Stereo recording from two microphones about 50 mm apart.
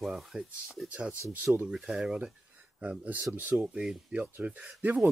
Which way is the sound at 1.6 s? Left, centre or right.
Centre.